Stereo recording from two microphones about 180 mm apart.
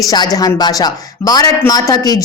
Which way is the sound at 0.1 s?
20° left (ahead or behind).